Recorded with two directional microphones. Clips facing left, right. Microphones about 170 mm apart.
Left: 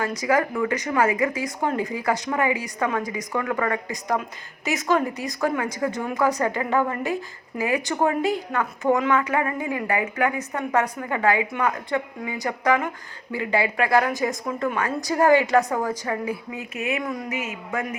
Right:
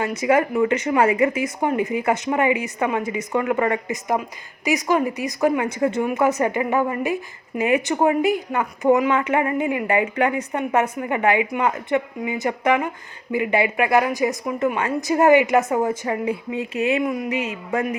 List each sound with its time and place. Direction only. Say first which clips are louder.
0.0 s a woman's voice: right 3 dB; 25° right (ahead or behind)